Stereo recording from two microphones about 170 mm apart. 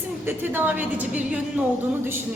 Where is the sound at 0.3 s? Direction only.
10° right (ahead or behind).